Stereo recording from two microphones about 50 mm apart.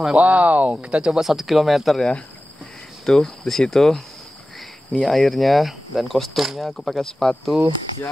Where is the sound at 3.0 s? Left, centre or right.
Centre.